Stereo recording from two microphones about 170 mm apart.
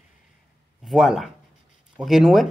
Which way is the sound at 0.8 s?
Centre (ahead or behind).